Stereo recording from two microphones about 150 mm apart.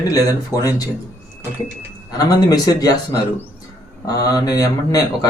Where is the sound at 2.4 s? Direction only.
25° left (ahead or behind).